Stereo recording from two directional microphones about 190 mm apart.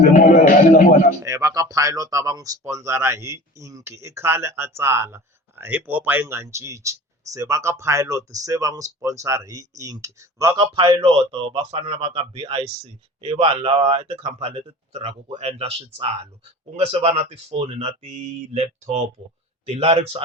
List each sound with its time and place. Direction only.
0.0 s a sound: 45° left (ahead or behind)
1.2 s speech: 15° right (ahead or behind)
10.8 s speech: 25° right (ahead or behind)